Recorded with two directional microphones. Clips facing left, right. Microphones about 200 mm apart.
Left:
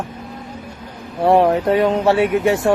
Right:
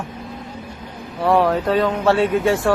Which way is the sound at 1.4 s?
25° left (ahead or behind).